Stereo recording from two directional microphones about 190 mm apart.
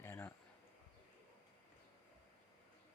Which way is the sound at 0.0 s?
10° left (ahead or behind).